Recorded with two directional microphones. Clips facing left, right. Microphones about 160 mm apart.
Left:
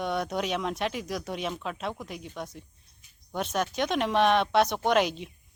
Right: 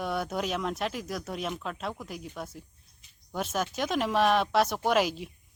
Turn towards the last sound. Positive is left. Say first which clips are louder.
# left 1 dB
turn(degrees=-5)  # may be behind; listen again after turning